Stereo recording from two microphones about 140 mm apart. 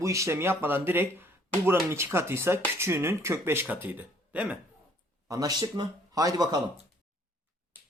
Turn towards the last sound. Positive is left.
turn(degrees=-30)  # may be behind; listen again after turning